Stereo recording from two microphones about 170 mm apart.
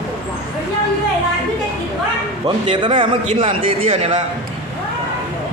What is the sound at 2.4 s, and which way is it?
A man's voice, 30° right (ahead or behind).